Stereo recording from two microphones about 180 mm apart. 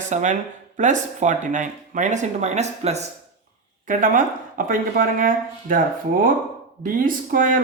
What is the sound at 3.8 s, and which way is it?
Speech, 50° right (ahead or behind).